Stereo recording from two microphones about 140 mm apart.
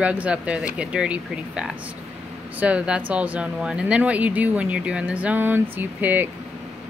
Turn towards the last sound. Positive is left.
turn(degrees=-15)  # may be behind; listen again after turning